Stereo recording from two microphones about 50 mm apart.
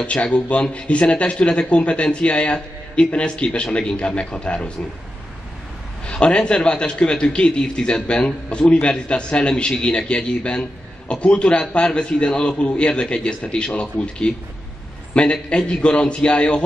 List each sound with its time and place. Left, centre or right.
0.0 s speech: left
6.0 s speech: centre